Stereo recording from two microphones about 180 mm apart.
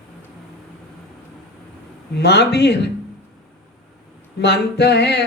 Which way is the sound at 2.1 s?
70° left (ahead or behind).